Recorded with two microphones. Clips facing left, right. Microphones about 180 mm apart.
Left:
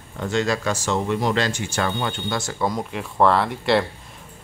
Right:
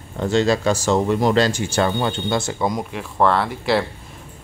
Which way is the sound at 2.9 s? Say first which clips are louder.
Left 2 dB; centre (ahead or behind).